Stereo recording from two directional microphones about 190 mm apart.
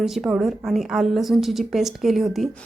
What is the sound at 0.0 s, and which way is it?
A woman's voice, 5° right (ahead or behind).